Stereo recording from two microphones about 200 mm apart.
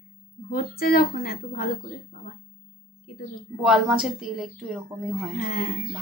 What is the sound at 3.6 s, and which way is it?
A woman's voice, 5° right (ahead or behind).